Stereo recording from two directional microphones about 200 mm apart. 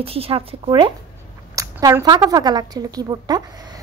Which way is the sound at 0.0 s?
30° right (ahead or behind).